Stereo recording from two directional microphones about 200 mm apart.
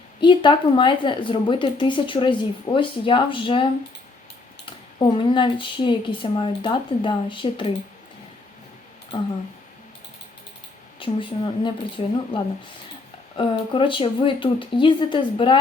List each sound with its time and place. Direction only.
0.2 s a woman's voice: 25° left (ahead or behind)
11.0 s a woman's voice: 25° left (ahead or behind)